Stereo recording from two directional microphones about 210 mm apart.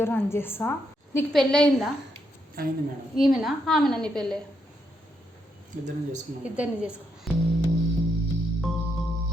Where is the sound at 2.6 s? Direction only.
45° right (ahead or behind).